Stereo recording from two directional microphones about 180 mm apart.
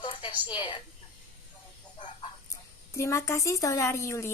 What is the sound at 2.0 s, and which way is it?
Fowl, 25° left (ahead or behind).